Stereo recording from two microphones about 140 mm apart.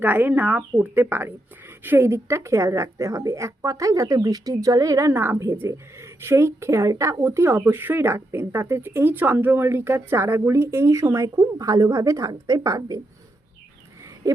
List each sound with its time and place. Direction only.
0.0 s speech: 10° right (ahead or behind)